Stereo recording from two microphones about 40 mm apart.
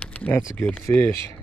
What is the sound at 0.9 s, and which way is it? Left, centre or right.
Speech, left.